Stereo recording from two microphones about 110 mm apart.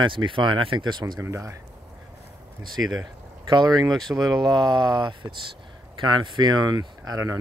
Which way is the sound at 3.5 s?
40° right (ahead or behind).